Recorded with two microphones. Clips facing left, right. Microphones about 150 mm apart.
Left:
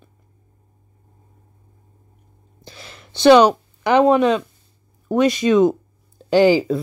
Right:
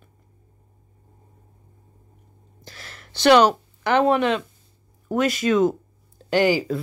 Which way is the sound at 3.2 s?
15° left (ahead or behind).